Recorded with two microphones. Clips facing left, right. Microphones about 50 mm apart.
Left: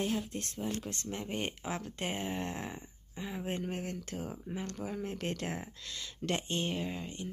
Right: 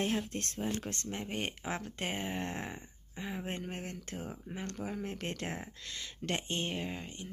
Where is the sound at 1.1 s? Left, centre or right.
Right.